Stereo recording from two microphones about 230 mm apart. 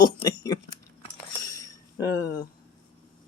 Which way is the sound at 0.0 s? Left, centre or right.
Centre.